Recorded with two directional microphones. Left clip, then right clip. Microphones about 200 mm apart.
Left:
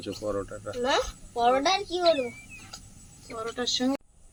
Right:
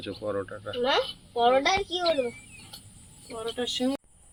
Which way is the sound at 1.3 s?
35° right (ahead or behind).